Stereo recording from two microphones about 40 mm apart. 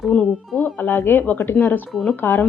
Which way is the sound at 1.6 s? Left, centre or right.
Left.